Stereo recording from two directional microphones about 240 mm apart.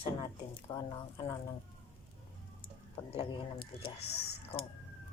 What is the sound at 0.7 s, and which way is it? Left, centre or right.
Speech, left.